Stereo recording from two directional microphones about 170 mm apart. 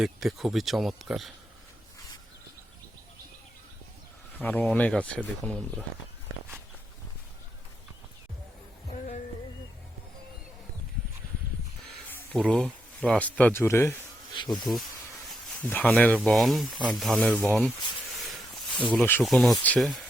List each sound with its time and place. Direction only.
0.0 s speech: centre (ahead or behind)
4.4 s speech: 10° left (ahead or behind)
8.9 s a sound: 45° left (ahead or behind)
12.3 s speech: centre (ahead or behind)
14.3 s insect: 30° left (ahead or behind)
15.3 s speech: 10° left (ahead or behind)
18.2 s a sound: centre (ahead or behind)
18.9 s speech: 10° left (ahead or behind)